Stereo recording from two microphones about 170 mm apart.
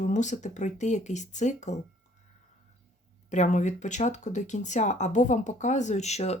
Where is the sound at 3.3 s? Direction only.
45° left (ahead or behind).